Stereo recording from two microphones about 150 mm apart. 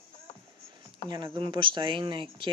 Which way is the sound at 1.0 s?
35° right (ahead or behind).